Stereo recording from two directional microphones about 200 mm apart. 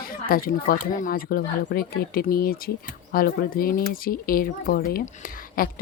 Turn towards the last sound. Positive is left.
turn(degrees=45)  # may be behind; listen again after turning